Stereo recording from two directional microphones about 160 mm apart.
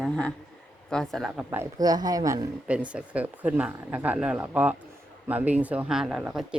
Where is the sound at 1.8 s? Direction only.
25° right (ahead or behind).